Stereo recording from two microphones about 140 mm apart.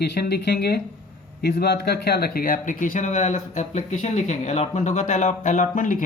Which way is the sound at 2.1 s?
90° left.